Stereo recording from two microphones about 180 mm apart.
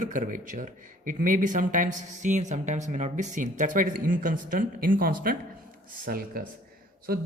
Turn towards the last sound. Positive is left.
turn(degrees=-55)  # may be behind; listen again after turning